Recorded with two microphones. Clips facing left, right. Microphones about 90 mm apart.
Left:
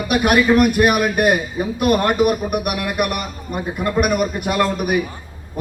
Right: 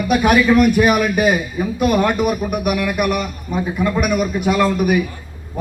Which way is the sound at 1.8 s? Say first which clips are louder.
Right 1 dB; 50° left (ahead or behind).